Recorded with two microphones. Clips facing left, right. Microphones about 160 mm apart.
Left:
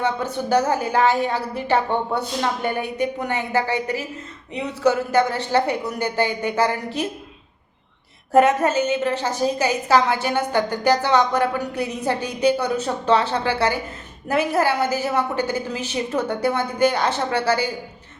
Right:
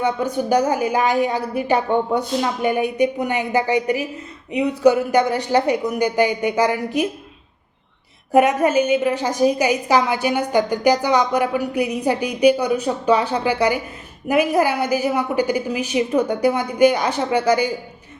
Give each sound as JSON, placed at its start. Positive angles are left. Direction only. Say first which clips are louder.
{"t": 0.0, "sound": "a woman's voice", "louder": "right 3 dB", "side_deg": -10}
{"t": 8.3, "sound": "a woman's voice", "louder": "right 1 dB", "side_deg": -15}